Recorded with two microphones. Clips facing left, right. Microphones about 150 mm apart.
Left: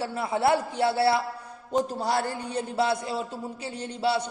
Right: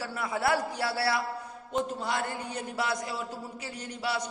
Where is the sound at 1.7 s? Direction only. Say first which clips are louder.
Left 5 dB; 35° left (ahead or behind).